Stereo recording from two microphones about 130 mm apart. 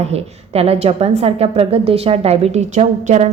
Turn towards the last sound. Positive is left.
turn(degrees=-60)  # may be behind; listen again after turning